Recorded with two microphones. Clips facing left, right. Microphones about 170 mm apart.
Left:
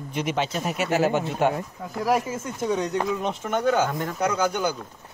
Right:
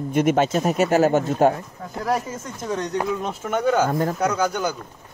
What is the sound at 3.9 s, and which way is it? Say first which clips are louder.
Speech: right 7 dB; 45° right (ahead or behind).